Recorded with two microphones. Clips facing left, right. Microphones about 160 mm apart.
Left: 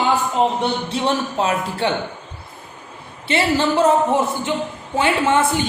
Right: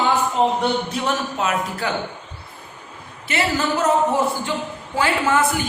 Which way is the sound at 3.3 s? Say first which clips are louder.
Left 4 dB; 25° left (ahead or behind).